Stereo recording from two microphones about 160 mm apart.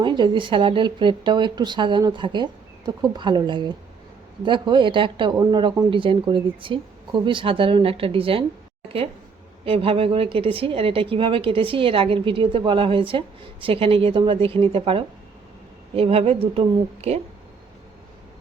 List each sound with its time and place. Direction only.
0.0 s speech: 30° right (ahead or behind)
9.6 s speech: 35° right (ahead or behind)